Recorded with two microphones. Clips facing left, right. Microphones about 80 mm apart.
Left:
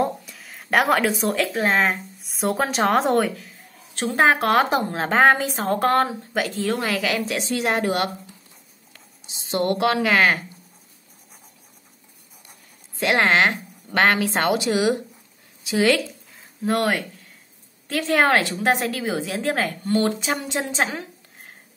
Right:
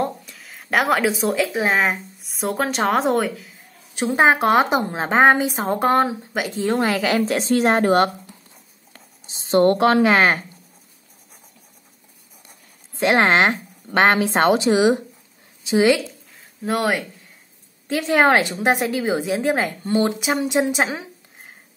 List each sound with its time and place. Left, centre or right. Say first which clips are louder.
0.0 s speech: left 1 dB; centre
3.9 s a woman's voice: right 2 dB; centre; by 7.2 s right
7.2 s a woman's voice: right 6 dB; right
13.0 s a woman's voice: right 2 dB; right
16.3 s a sound: left 1 dB; centre
17.8 s a woman's voice: right 3 dB; centre